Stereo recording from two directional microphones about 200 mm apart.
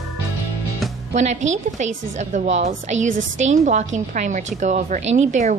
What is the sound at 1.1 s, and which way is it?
A woman's voice, 35° right (ahead or behind).